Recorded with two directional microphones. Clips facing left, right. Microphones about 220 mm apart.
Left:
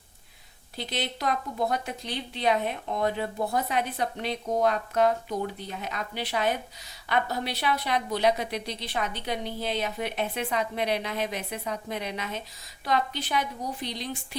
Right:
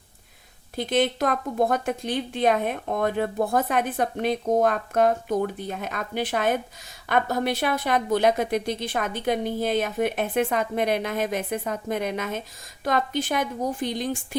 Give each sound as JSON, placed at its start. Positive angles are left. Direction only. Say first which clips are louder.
{"t": 0.8, "sound": "speech", "louder": "right 10 dB", "side_deg": -50}